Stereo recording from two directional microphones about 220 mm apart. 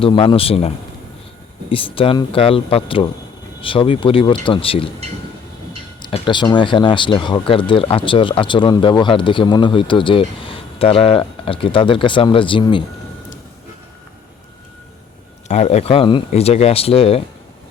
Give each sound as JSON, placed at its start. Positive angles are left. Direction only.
{"t": 0.0, "sound": "speech", "side_deg": 20}
{"t": 1.7, "sound": "speech", "side_deg": 25}
{"t": 6.0, "sound": "speech", "side_deg": 25}
{"t": 15.4, "sound": "speech", "side_deg": 30}